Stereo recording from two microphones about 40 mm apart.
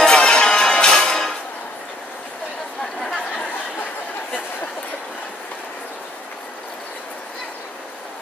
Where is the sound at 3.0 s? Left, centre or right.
Centre.